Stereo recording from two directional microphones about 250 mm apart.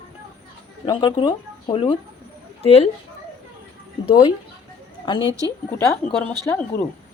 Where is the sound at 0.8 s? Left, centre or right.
Centre.